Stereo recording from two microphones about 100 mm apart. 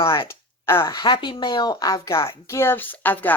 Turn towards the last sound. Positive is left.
turn(degrees=20)  # may be behind; listen again after turning